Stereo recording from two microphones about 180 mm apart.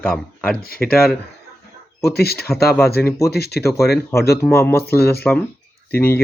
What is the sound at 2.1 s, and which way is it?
Speech, 60° left (ahead or behind).